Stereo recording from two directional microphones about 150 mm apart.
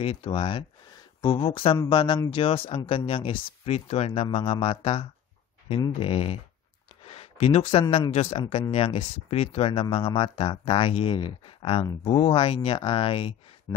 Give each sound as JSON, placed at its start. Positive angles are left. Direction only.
{"t": 0.0, "sound": "speech", "side_deg": 40}
{"t": 7.1, "sound": "a sound", "side_deg": 45}
{"t": 8.1, "sound": "speech", "side_deg": 45}